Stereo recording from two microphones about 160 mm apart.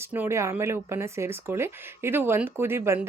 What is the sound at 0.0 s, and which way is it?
Speech, 15° right (ahead or behind).